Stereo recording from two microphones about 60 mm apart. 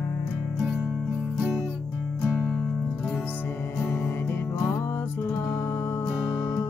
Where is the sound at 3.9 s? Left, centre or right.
Left.